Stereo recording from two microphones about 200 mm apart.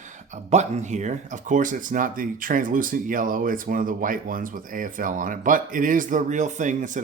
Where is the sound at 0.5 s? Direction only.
35° right (ahead or behind).